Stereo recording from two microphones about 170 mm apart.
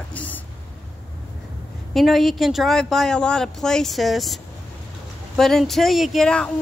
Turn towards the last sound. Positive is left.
turn(degrees=5)  # may be behind; listen again after turning